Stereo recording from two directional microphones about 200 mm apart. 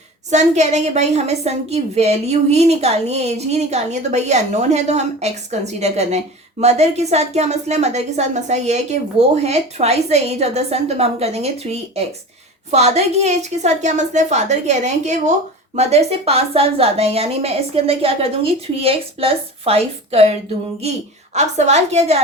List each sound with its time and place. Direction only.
0.3 s a woman's voice: 35° right (ahead or behind)
21.3 s a woman's voice: 35° right (ahead or behind)